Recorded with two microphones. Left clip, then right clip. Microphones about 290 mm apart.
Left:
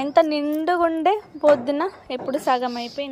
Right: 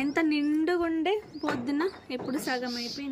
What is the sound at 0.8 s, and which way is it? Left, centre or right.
Speech, left.